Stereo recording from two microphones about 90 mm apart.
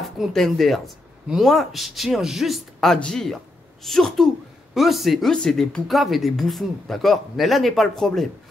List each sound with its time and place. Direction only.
0.2 s speech: 5° left (ahead or behind)